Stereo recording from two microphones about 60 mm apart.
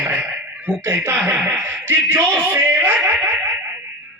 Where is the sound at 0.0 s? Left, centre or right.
Right.